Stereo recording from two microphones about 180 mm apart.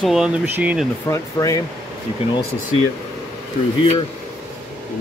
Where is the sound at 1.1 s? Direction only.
20° left (ahead or behind).